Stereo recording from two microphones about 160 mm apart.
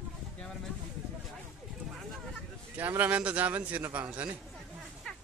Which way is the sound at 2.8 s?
10° right (ahead or behind).